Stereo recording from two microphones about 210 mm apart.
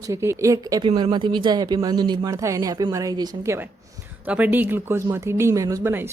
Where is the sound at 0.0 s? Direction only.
15° right (ahead or behind).